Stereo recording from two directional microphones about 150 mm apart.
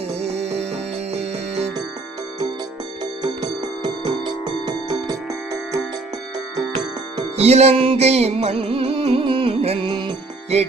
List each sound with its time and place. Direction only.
0.1 s music: 45° right (ahead or behind)
3.0 s music: 25° right (ahead or behind)
7.3 s music: 45° right (ahead or behind)